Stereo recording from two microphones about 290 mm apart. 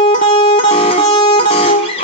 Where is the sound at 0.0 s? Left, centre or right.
Centre.